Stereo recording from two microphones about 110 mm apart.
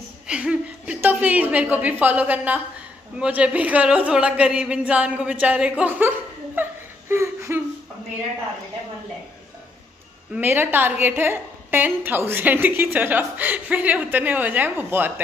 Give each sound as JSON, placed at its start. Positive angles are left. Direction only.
{"t": 0.3, "sound": "a sound", "side_deg": -10}
{"t": 3.2, "sound": "a woman's voice", "side_deg": -10}
{"t": 10.3, "sound": "a woman's voice", "side_deg": -20}